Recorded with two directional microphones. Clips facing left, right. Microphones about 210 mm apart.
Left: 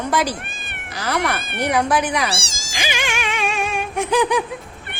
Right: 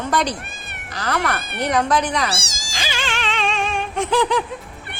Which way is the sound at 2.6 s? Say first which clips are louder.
Left 2 dB; 15° left (ahead or behind).